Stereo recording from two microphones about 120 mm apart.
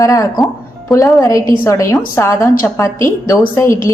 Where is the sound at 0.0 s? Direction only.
30° left (ahead or behind).